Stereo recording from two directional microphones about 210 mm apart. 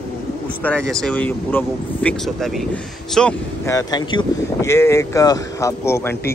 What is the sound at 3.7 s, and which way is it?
Speech, 15° left (ahead or behind).